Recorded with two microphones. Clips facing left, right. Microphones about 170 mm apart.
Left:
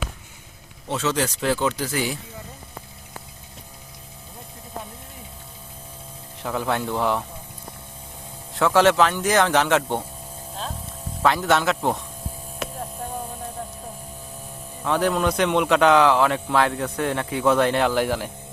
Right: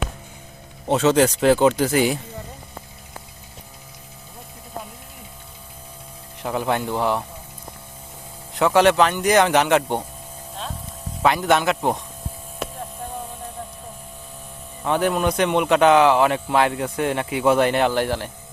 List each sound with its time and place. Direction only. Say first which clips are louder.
0.9 s speech: right 8 dB; 55° right (ahead or behind)
6.4 s a man's voice: right 2 dB; 5° right (ahead or behind)
8.9 s speech: right 1 dB; centre (ahead or behind)
9.3 s a man's voice: right 4 dB; 15° right (ahead or behind)
11.2 s a man's voice: right 2 dB; 10° right (ahead or behind)
14.8 s speech: right 1 dB; 5° right (ahead or behind)